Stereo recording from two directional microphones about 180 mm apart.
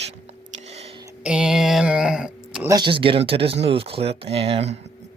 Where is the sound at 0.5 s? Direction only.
35° right (ahead or behind).